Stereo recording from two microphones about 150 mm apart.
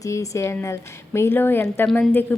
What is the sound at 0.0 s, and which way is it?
A woman's voice, 20° left (ahead or behind).